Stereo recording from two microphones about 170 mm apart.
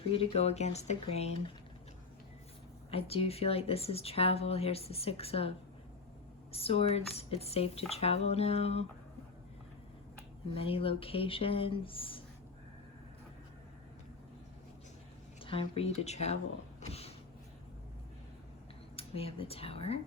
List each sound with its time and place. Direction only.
0.0 s speech: 35° left (ahead or behind)
2.9 s speech: 35° left (ahead or behind)
10.5 s speech: 35° left (ahead or behind)
15.4 s speech: 30° left (ahead or behind)
18.9 s speech: 35° left (ahead or behind)